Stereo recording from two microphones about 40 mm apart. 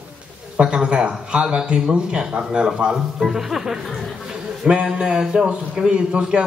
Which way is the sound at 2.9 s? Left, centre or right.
Centre.